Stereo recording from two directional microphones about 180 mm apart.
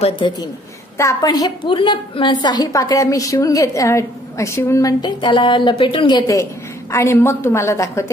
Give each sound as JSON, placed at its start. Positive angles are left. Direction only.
{"t": 0.0, "sound": "a woman's voice", "side_deg": 25}